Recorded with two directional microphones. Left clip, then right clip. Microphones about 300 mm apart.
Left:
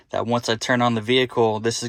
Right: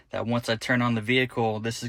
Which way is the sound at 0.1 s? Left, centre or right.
Centre.